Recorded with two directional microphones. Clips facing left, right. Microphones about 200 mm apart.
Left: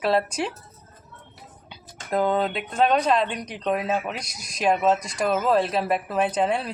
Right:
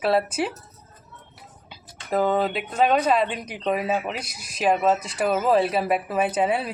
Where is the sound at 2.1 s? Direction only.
5° right (ahead or behind).